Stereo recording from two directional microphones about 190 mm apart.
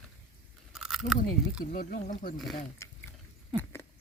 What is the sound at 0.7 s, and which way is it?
Chewing, centre (ahead or behind).